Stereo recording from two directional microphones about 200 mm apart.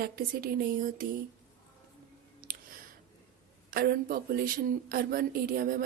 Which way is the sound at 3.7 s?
50° right (ahead or behind).